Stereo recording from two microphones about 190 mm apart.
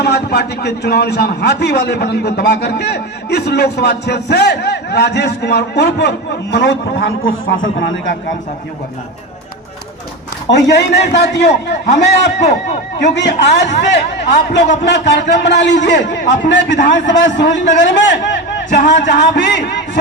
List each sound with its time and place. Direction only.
0.0 s a man's voice: 60° left (ahead or behind); by 8.1 s 85° left
10.5 s a man's voice: 65° left (ahead or behind)
19.2 s a man's voice: 65° left (ahead or behind)